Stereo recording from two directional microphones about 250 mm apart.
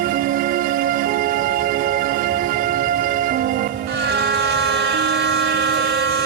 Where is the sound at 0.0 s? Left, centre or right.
Right.